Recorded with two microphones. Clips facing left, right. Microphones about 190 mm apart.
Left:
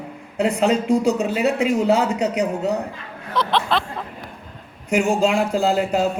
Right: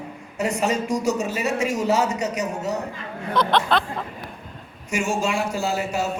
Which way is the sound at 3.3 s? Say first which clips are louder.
Even; centre (ahead or behind).